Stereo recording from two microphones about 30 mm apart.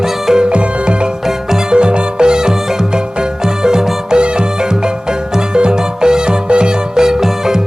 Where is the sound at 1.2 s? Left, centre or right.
Centre.